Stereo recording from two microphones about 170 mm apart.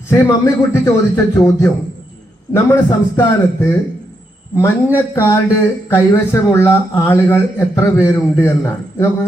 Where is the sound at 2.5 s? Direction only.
15° left (ahead or behind).